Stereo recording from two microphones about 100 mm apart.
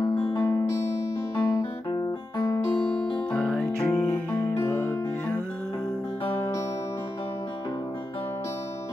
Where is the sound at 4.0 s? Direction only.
20° left (ahead or behind).